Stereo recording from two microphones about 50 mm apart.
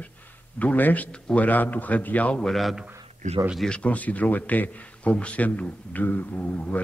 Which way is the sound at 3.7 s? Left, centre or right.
Left.